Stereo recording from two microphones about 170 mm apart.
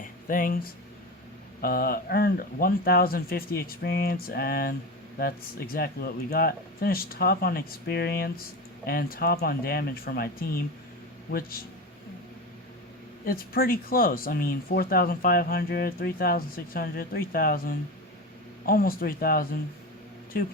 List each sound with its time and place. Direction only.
0.0 s a sound: 55° left (ahead or behind)
1.6 s speech: 60° left (ahead or behind)
13.2 s speech: 60° left (ahead or behind)